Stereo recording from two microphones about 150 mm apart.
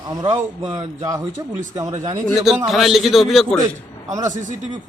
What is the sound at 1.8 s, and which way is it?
Speech, 50° right (ahead or behind).